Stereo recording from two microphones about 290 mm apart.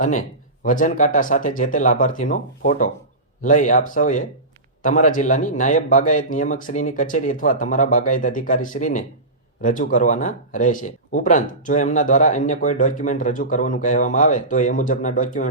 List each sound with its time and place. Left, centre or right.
0.0 s speech: left